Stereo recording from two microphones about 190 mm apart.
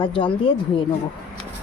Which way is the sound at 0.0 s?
25° left (ahead or behind).